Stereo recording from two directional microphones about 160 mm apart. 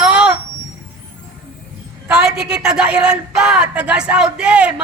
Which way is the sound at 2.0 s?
5° right (ahead or behind).